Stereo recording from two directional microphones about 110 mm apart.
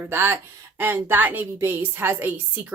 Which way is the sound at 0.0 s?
20° right (ahead or behind).